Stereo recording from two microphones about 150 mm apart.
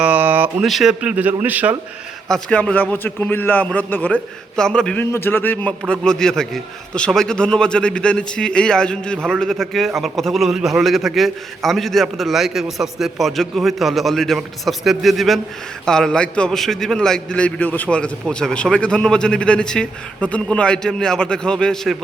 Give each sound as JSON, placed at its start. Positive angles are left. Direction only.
{"t": 0.0, "sound": "a sound", "side_deg": -10}
{"t": 0.6, "sound": "a man's voice", "side_deg": 0}
{"t": 2.3, "sound": "a man's voice", "side_deg": 5}